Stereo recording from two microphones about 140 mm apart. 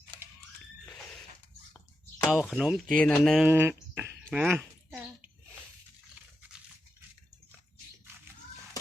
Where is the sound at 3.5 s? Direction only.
15° right (ahead or behind).